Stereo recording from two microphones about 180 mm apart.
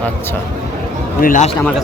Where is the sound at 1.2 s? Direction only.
45° left (ahead or behind).